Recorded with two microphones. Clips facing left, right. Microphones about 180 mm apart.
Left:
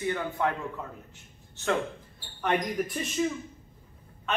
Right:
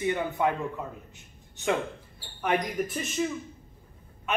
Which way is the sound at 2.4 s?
5° right (ahead or behind).